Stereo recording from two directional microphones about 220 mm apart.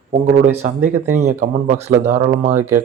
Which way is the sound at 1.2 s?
30° right (ahead or behind).